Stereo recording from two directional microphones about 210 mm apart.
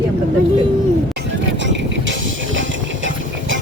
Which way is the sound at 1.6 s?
60° right (ahead or behind).